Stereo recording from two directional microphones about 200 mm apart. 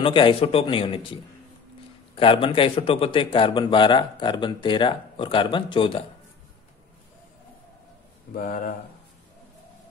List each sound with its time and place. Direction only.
0.0 s a man's voice: 25° left (ahead or behind)
8.4 s speech: 45° left (ahead or behind)